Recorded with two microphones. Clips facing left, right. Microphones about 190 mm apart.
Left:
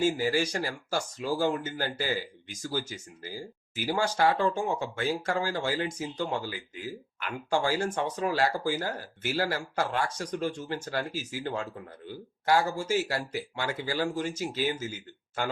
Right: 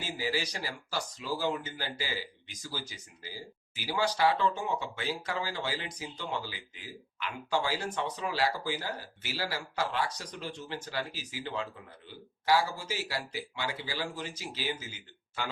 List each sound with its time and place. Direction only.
0.0 s speech: 50° left (ahead or behind)